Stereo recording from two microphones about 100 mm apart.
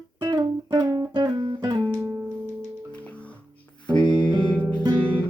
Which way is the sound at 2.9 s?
15° left (ahead or behind).